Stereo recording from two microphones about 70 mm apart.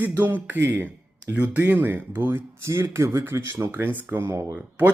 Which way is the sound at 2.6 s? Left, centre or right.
Right.